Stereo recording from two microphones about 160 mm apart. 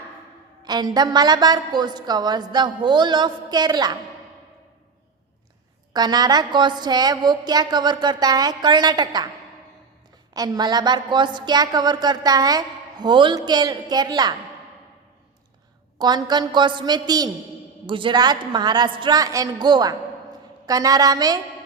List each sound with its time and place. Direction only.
0.6 s a woman's voice: 25° right (ahead or behind)
5.9 s a woman's voice: 25° right (ahead or behind)
10.3 s a woman's voice: 25° right (ahead or behind)
16.0 s a woman's voice: 25° right (ahead or behind)